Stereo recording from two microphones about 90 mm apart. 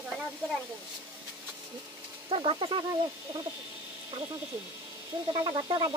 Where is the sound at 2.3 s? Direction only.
70° right (ahead or behind).